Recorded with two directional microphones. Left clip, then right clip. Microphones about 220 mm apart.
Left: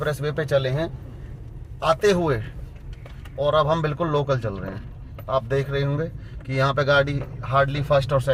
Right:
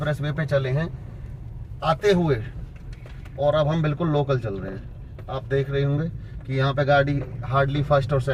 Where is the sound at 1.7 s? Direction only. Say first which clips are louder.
Left 1 dB; 35° left (ahead or behind).